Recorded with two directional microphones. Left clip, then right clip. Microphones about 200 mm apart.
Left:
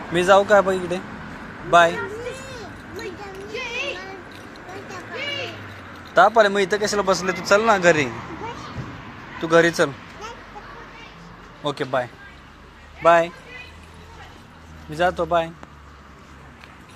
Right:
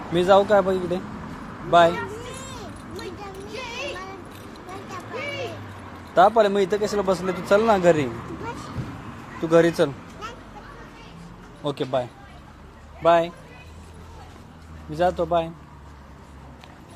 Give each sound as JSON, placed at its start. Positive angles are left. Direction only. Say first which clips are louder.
{"t": 0.1, "sound": "speech", "louder": "left 2 dB", "side_deg": 0}
{"t": 3.5, "sound": "a sound", "louder": "left 6 dB", "side_deg": -65}
{"t": 6.1, "sound": "speech", "louder": "left 2 dB", "side_deg": 0}
{"t": 9.4, "sound": "speech", "louder": "left 1 dB", "side_deg": -5}
{"t": 11.6, "sound": "speech", "louder": "left 2 dB", "side_deg": 0}
{"t": 13.0, "sound": "a man's voice", "louder": "left 3 dB", "side_deg": 10}
{"t": 14.9, "sound": "a man's voice", "louder": "left 1 dB", "side_deg": 10}